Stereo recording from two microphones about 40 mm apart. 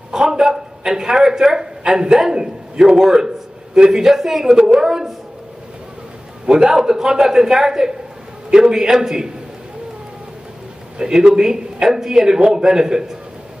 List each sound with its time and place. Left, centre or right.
0.1 s a man's voice: centre
6.4 s a man's voice: centre
11.0 s a man's voice: centre